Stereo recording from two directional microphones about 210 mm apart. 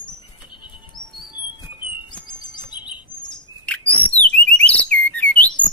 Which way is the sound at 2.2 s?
20° left (ahead or behind).